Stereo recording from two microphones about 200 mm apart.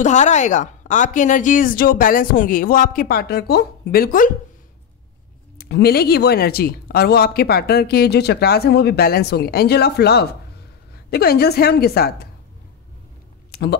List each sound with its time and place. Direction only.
0.0 s speech: 35° left (ahead or behind)
5.6 s speech: 50° left (ahead or behind)
13.5 s a sound: 55° left (ahead or behind)